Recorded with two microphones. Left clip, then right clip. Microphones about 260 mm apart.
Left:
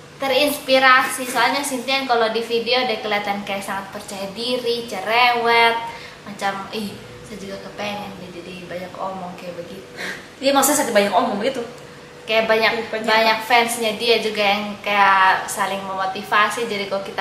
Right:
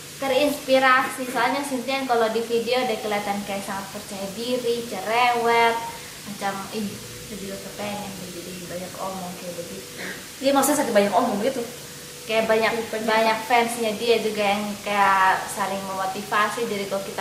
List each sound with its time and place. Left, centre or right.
0.2 s a child's voice: centre
10.0 s a woman's voice: centre
12.3 s a woman's voice: centre